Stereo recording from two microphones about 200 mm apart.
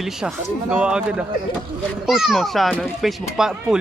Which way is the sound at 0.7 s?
5° right (ahead or behind).